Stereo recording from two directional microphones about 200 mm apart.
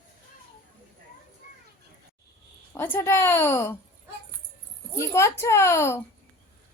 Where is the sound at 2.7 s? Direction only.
10° left (ahead or behind).